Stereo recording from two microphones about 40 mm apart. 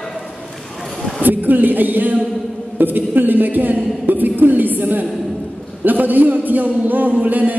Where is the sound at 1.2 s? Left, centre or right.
Right.